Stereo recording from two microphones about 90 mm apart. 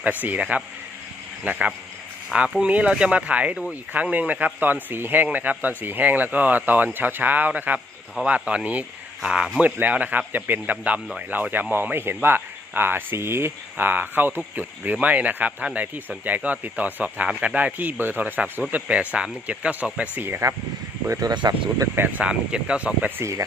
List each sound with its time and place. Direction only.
0.0 s speech: 20° right (ahead or behind)
21.1 s speech: 45° right (ahead or behind)
21.9 s speech: 20° right (ahead or behind)